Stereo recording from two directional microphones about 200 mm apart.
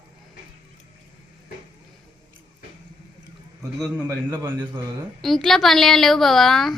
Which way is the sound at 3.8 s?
10° right (ahead or behind).